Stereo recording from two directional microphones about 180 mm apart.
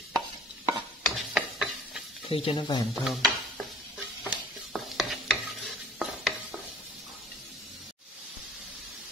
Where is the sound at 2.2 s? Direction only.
30° left (ahead or behind).